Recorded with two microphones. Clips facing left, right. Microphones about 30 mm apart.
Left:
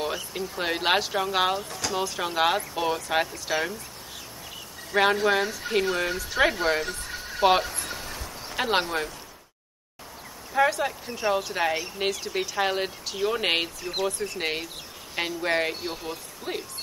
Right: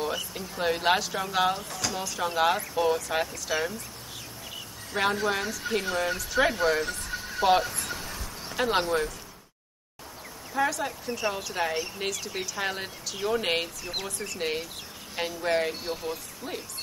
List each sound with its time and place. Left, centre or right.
0.6 s speech: centre
1.6 s speech: centre
2.0 s speech: centre
4.9 s speech: centre
7.6 s a sound: centre
8.5 s speech: centre
10.5 s speech: left
10.9 s speech: centre
13.1 s speech: centre
13.4 s speech: left